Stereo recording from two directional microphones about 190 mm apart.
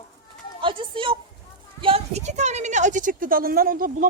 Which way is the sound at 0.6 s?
25° right (ahead or behind).